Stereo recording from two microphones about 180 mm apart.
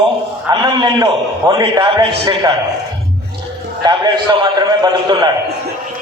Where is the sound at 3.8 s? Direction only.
20° right (ahead or behind).